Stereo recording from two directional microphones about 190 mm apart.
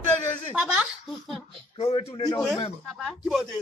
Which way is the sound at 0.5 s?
5° right (ahead or behind).